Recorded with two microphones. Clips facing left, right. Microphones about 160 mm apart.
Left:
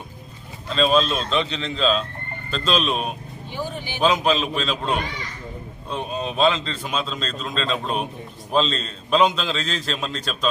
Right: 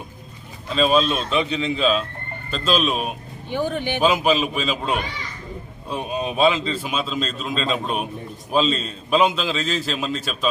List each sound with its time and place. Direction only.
0.7 s a man's voice: 5° right (ahead or behind)
3.5 s speech: 60° right (ahead or behind)
4.0 s a man's voice: 5° right (ahead or behind)